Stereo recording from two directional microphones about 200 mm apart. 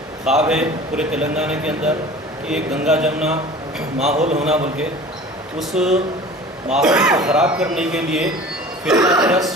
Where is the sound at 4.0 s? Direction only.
35° right (ahead or behind).